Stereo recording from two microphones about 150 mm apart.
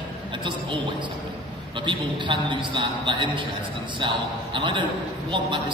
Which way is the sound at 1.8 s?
30° right (ahead or behind).